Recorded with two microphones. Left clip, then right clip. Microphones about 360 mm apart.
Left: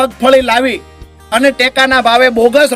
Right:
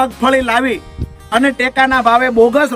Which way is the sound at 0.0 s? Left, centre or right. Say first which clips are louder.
Left 4 dB; centre.